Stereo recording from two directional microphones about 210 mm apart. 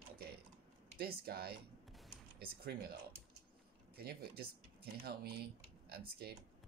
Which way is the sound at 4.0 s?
45° right (ahead or behind).